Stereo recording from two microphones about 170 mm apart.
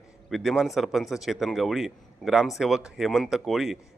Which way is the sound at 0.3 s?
Centre (ahead or behind).